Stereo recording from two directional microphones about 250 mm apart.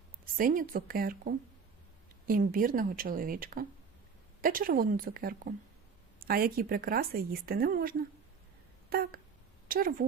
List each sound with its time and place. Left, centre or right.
0.3 s a woman's voice: right
8.9 s a sound: right
9.6 s a woman's voice: right